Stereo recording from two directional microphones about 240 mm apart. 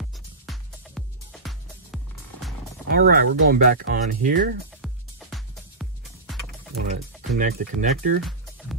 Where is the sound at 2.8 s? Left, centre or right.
Right.